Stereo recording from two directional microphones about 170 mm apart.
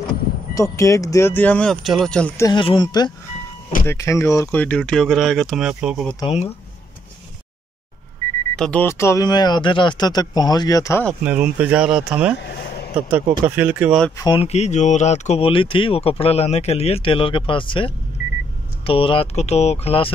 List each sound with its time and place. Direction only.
0.6 s speech: 20° left (ahead or behind)
2.4 s speech: 30° left (ahead or behind); by 6.0 s 5° right (ahead or behind)
8.5 s speech: 5° left (ahead or behind)
11.2 s speech: 10° right (ahead or behind)
14.1 s speech: 25° left (ahead or behind)